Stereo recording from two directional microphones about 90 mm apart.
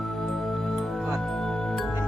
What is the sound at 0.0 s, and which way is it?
Music, 5° left (ahead or behind).